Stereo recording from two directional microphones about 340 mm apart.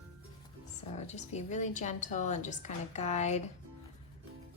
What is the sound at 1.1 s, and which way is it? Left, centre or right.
A woman's voice, centre.